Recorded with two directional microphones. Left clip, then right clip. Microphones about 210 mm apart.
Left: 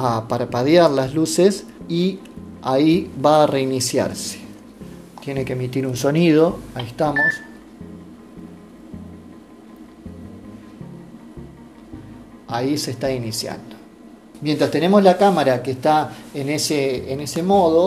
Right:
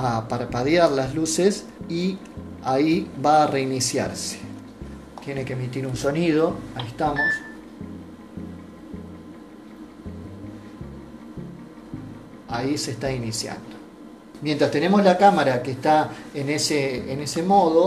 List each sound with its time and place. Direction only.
0.0 s speech: 40° left (ahead or behind)
12.4 s speech: 45° left (ahead or behind)